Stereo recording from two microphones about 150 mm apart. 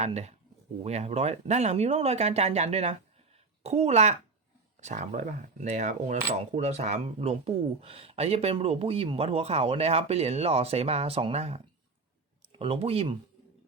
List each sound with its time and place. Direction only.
0.0 s speech: 45° right (ahead or behind)